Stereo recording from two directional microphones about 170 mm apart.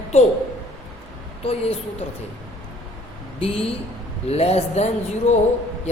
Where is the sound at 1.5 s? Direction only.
35° left (ahead or behind).